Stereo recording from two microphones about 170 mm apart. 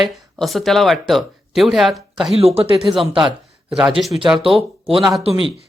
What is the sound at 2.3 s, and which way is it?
Speech, 35° right (ahead or behind).